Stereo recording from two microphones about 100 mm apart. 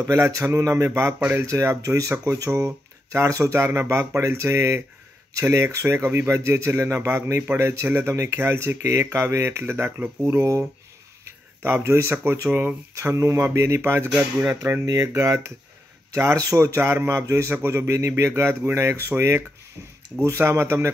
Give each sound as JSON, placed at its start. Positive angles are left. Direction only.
{"t": 0.0, "sound": "speech", "side_deg": -30}
{"t": 12.9, "sound": "speech", "side_deg": -30}